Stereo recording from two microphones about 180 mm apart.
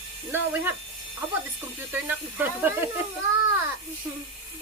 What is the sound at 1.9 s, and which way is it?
Speech, 10° right (ahead or behind).